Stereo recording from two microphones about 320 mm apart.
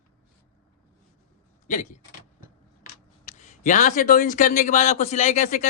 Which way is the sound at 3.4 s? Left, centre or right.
Left.